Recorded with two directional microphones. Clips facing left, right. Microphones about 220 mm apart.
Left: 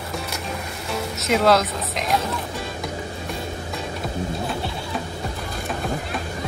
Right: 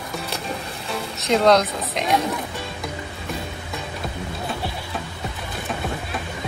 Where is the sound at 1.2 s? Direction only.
5° left (ahead or behind).